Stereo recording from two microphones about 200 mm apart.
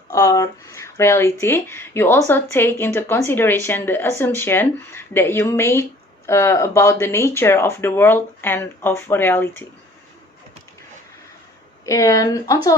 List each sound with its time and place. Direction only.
0.1 s speech: 15° left (ahead or behind)
11.9 s speech: 15° left (ahead or behind)